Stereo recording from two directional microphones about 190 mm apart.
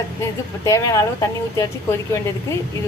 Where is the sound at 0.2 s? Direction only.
15° left (ahead or behind).